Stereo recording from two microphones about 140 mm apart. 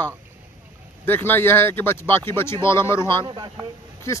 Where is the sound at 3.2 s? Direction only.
30° right (ahead or behind).